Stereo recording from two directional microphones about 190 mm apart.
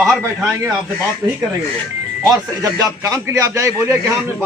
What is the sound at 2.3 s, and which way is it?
A man's voice, 20° right (ahead or behind).